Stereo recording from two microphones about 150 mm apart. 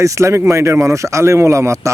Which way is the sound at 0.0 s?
20° right (ahead or behind).